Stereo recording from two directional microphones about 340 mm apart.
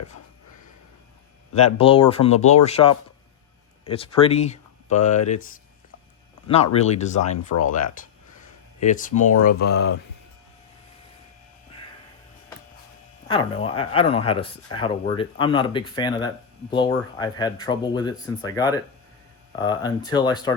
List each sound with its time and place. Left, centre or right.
1.8 s speech: centre
6.7 s speech: centre
13.2 s speech: centre